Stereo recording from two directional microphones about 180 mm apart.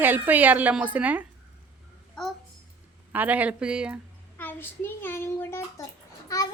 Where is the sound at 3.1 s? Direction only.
10° right (ahead or behind).